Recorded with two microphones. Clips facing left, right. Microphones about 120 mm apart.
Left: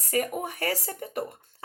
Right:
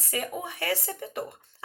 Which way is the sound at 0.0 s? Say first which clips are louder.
Left 5 dB; 45° left (ahead or behind).